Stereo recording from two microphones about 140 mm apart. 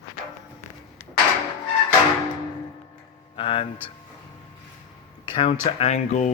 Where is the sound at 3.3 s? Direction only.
40° left (ahead or behind).